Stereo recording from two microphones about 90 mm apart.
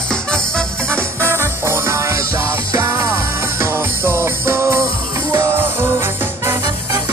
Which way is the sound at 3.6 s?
30° right (ahead or behind).